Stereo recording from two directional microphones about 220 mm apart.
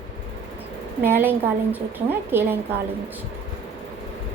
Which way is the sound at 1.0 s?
10° right (ahead or behind).